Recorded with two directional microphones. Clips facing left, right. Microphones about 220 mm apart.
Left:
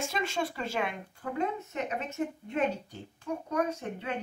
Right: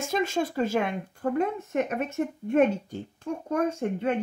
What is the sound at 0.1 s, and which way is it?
Speech, 45° right (ahead or behind).